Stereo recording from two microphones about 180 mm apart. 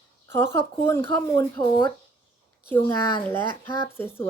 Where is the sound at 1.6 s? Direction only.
25° left (ahead or behind).